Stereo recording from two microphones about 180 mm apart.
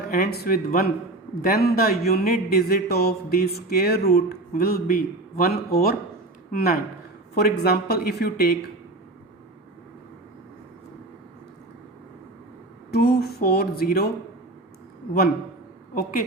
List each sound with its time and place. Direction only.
0.1 s a man's voice: 60° left (ahead or behind)
12.9 s a man's voice: 60° left (ahead or behind)